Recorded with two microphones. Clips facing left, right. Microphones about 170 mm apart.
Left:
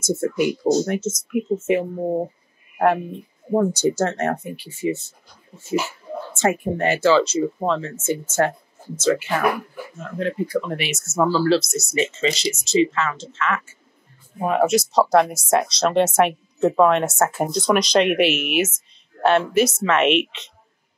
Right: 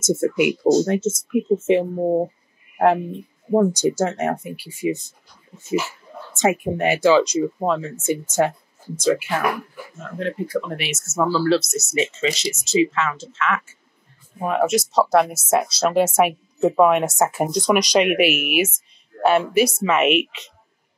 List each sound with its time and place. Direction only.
0.0 s speech: 25° right (ahead or behind)
3.5 s speech: 15° right (ahead or behind)
6.3 s speech: 15° right (ahead or behind)
10.1 s speech: centre (ahead or behind)